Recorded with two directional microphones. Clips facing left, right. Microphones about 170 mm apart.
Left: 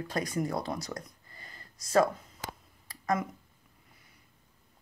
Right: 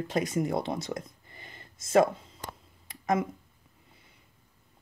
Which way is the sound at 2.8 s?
20° right (ahead or behind).